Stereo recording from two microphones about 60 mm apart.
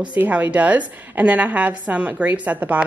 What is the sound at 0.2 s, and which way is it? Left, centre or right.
A woman's voice, right.